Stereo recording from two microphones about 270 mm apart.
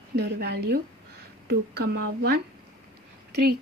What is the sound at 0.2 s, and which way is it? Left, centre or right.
A woman's voice, right.